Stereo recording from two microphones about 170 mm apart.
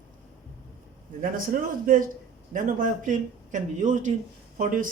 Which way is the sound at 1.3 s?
55° right (ahead or behind).